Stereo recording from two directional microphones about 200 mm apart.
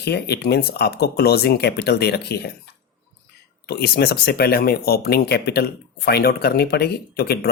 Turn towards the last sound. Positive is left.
turn(degrees=50)  # may be behind; listen again after turning